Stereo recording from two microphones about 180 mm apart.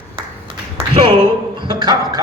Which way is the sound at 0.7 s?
30° right (ahead or behind).